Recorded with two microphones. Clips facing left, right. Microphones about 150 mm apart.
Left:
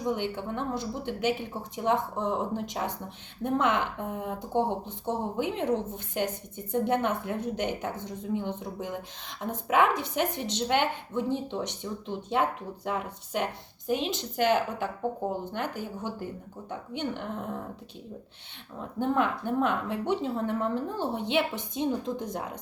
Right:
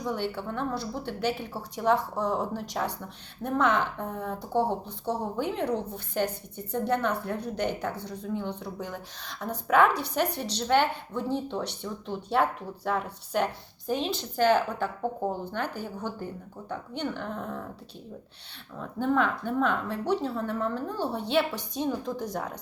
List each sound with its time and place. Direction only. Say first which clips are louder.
0.1 s speech: even; 20° left (ahead or behind)
18.8 s speech: right 1 dB; 20° left (ahead or behind)